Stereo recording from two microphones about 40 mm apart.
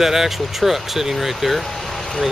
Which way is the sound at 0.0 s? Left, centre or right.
Centre.